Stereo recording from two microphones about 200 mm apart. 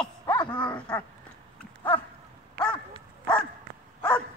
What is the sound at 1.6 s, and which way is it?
Dog, 10° left (ahead or behind).